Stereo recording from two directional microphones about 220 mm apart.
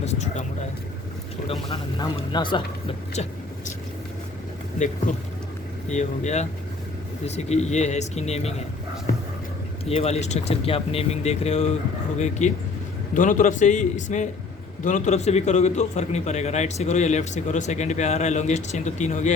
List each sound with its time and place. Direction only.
0.0 s vehicle: 30° left (ahead or behind)
1.5 s speech: 20° left (ahead or behind)
4.8 s a man's voice: 35° left (ahead or behind)
9.8 s a man's voice: 30° left (ahead or behind)